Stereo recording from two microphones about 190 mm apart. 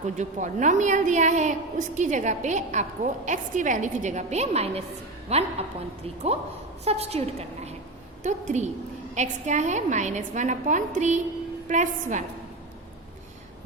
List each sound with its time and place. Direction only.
0.0 s a woman's voice: 40° right (ahead or behind)
6.8 s a woman's voice: 35° right (ahead or behind)